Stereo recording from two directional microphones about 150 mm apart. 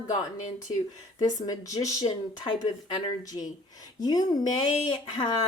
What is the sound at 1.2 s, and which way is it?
A woman's voice, 25° left (ahead or behind).